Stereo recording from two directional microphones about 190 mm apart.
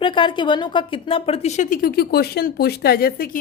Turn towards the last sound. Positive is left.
turn(degrees=50)  # may be behind; listen again after turning